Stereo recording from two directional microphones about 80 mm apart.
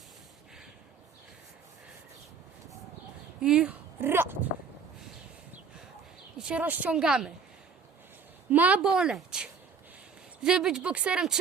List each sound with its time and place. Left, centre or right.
3.4 s a woman's voice: centre
4.0 s a sound: right
6.4 s a woman's voice: centre
8.4 s a woman's voice: right
8.9 s a woman's voice: centre